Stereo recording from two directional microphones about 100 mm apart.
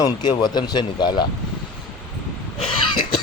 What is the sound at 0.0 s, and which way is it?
Speech, 45° left (ahead or behind).